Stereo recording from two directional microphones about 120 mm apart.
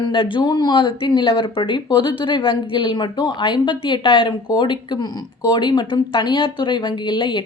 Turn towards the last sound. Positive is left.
turn(degrees=40)  # may be behind; listen again after turning